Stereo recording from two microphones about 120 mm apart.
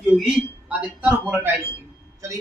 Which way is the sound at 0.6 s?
10° right (ahead or behind).